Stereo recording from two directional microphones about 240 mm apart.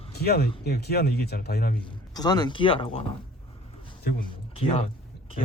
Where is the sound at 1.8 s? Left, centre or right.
Centre.